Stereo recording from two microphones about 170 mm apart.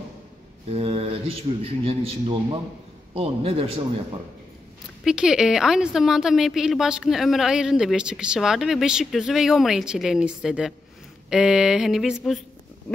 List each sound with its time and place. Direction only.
0.7 s a man's voice: 35° right (ahead or behind)
5.0 s a woman's voice: 5° right (ahead or behind)